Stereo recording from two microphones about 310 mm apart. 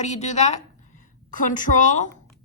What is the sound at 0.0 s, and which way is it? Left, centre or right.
A woman's voice, left.